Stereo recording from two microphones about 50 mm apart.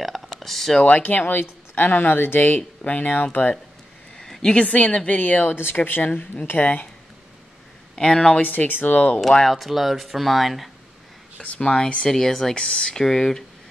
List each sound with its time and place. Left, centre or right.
0.0 s speech: centre
0.8 s speech: left
1.2 s speech: left
4.2 s a woman's voice: centre; by 6.9 s left
7.9 s speech: centre
8.4 s speech: left
9.4 s speech: centre
11.4 s speech: left; by 12.5 s centre
12.5 s a woman's voice: left
12.9 s speech: centre